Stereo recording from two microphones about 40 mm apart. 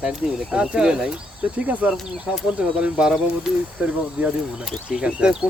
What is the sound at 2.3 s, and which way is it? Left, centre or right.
Speech, centre.